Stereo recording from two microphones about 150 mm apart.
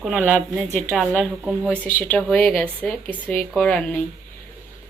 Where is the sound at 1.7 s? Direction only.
10° left (ahead or behind).